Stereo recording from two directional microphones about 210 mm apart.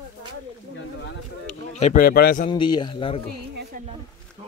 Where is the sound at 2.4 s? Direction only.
25° left (ahead or behind).